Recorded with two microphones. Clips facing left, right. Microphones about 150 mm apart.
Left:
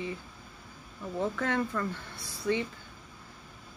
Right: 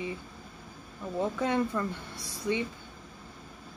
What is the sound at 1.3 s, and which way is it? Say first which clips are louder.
Speech: right 2 dB; 15° right (ahead or behind).